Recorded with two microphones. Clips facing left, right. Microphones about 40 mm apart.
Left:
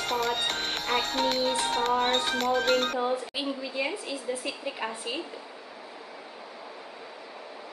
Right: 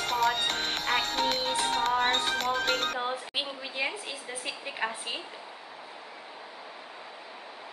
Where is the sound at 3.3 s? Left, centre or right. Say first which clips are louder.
Left 2 dB; right.